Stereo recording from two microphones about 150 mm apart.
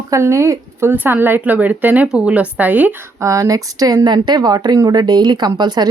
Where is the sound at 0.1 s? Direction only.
20° right (ahead or behind).